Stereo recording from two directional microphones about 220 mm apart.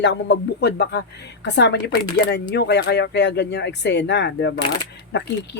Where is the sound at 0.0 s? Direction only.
50° left (ahead or behind).